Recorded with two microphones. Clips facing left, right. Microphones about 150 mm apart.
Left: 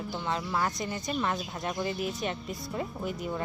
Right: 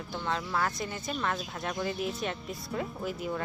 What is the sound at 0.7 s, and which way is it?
Speech, centre (ahead or behind).